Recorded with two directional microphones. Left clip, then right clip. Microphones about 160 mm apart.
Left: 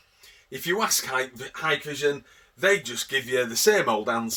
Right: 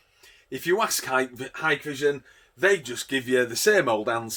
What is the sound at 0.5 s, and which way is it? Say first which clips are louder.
Speech: right 1 dB; 50° right (ahead or behind).